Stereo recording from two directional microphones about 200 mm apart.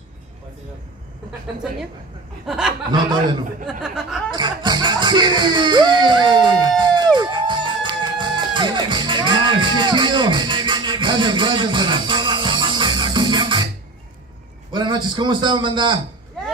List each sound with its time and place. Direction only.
2.4 s speech: 5° right (ahead or behind)
2.9 s a man's voice: 20° right (ahead or behind)
3.6 s speech: 5° right (ahead or behind)
4.3 s music: 20° right (ahead or behind)
6.8 s crowd: 20° right (ahead or behind)
7.2 s music: 25° right (ahead or behind)
14.7 s a man's voice: 25° right (ahead or behind)